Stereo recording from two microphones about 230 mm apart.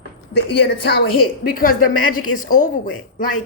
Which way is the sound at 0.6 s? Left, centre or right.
Left.